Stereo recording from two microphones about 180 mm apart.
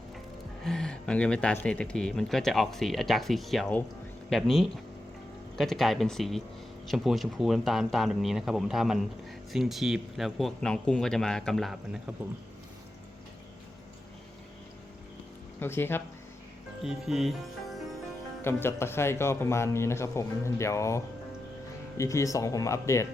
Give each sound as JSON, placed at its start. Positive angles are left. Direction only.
{"t": 0.6, "sound": "speech", "side_deg": 5}
{"t": 15.6, "sound": "speech", "side_deg": 10}
{"t": 16.8, "sound": "speech", "side_deg": 0}
{"t": 18.4, "sound": "speech", "side_deg": 15}